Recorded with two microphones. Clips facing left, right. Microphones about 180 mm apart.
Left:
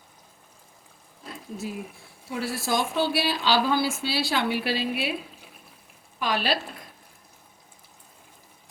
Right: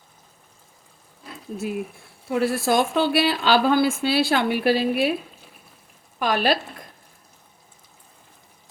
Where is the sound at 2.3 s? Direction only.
55° right (ahead or behind).